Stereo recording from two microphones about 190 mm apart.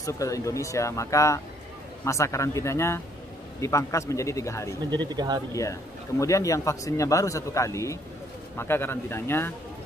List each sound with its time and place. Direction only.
0.0 s speech: 15° left (ahead or behind)
4.9 s speech: 20° right (ahead or behind)
5.5 s speech: 15° left (ahead or behind)